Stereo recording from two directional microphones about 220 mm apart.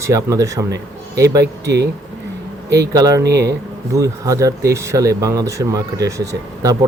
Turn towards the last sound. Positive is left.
turn(degrees=-15)  # may be behind; listen again after turning